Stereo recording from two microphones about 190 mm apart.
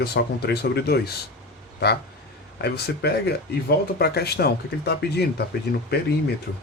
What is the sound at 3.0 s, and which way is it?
Speech, 60° left (ahead or behind).